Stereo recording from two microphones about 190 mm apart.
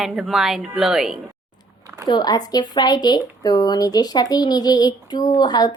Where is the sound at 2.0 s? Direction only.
20° left (ahead or behind).